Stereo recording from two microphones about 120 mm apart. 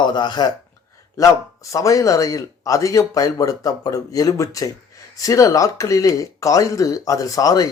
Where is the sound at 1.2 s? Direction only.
25° left (ahead or behind).